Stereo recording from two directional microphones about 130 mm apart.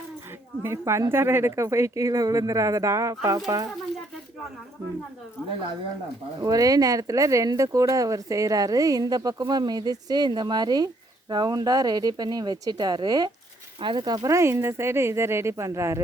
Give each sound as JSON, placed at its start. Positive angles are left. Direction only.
{"t": 0.6, "sound": "speech", "side_deg": -20}
{"t": 6.4, "sound": "speech", "side_deg": -30}